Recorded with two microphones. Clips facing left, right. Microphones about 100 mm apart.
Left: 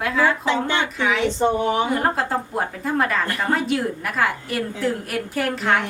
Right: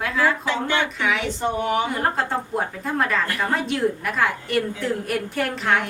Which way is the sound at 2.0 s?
Centre (ahead or behind).